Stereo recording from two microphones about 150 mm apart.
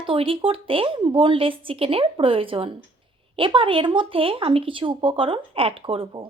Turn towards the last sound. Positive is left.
turn(degrees=-35)  # may be behind; listen again after turning